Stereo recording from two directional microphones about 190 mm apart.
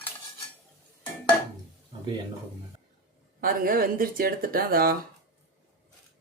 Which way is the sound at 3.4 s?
50° right (ahead or behind).